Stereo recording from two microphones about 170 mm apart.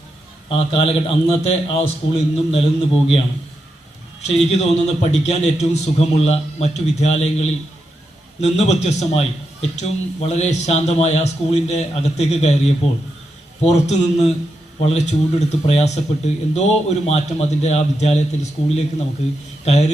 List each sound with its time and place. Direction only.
0.4 s a man's voice: 35° left (ahead or behind)
4.2 s a man's voice: 40° left (ahead or behind)